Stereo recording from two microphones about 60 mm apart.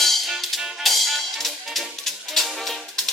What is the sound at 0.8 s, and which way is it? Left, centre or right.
Music, centre.